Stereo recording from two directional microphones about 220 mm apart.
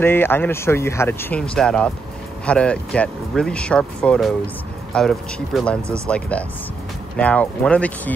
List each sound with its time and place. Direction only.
0.0 s speech: 10° left (ahead or behind)